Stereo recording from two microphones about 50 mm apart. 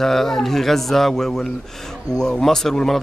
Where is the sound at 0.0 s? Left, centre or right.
Centre.